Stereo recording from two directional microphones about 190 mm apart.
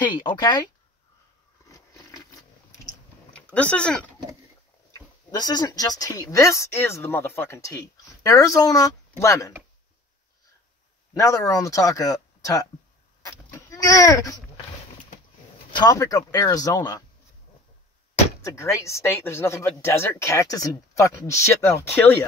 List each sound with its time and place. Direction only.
0.0 s speech: 25° left (ahead or behind)
1.7 s biting: 20° left (ahead or behind)
3.3 s speech: 5° left (ahead or behind)
4.9 s speech: 20° left (ahead or behind)
11.1 s speech: 15° left (ahead or behind)
13.2 s chicken: 15° left (ahead or behind)
15.7 s speech: 20° left (ahead or behind)
18.4 s speech: 15° left (ahead or behind)